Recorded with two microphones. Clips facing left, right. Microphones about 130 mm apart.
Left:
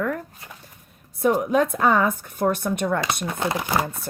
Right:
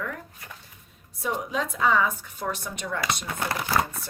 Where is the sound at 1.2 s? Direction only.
55° left (ahead or behind).